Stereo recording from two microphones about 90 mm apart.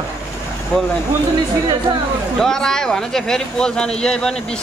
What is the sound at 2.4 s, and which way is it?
Speech, 5° left (ahead or behind).